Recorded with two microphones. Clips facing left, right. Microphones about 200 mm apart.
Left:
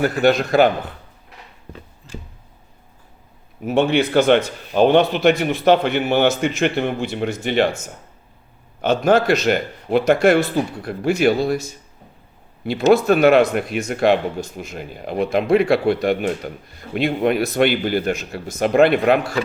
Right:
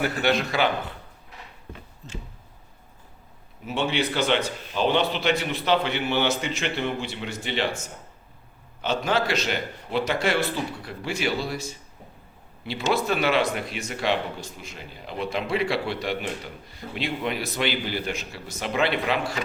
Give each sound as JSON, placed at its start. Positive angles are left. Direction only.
{"t": 0.0, "sound": "a man's voice", "side_deg": 45}
{"t": 2.0, "sound": "a sound", "side_deg": -40}
{"t": 3.6, "sound": "a man's voice", "side_deg": 50}
{"t": 8.8, "sound": "a man's voice", "side_deg": 50}
{"t": 12.6, "sound": "a man's voice", "side_deg": 50}